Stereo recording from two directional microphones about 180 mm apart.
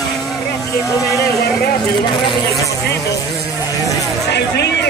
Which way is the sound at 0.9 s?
20° left (ahead or behind).